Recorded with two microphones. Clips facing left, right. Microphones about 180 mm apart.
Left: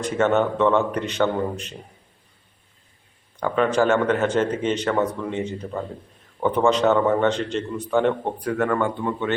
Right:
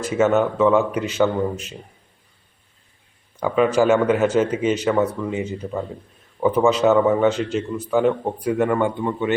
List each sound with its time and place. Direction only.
0.0 s a man's voice: 5° right (ahead or behind)
3.4 s a man's voice: 10° right (ahead or behind)
8.5 s a man's voice: 15° right (ahead or behind)